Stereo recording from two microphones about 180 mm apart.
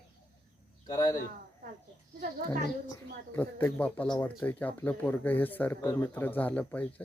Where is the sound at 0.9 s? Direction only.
20° left (ahead or behind).